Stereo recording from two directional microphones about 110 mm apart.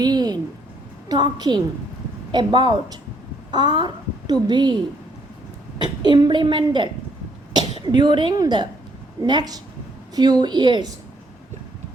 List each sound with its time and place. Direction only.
0.0 s a sound: 40° right (ahead or behind)
1.0 s a woman's voice: 40° right (ahead or behind)
6.0 s a woman's voice: 40° right (ahead or behind)